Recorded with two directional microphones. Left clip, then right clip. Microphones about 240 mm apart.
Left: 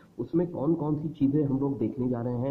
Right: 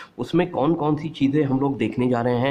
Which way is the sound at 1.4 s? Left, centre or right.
Right.